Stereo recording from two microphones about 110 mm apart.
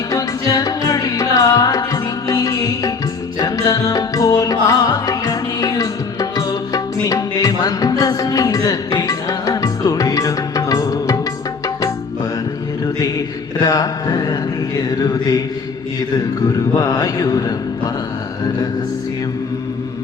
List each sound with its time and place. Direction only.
0.1 s music: 30° left (ahead or behind)
13.6 s mantra: 35° left (ahead or behind)
16.7 s mantra: 35° left (ahead or behind)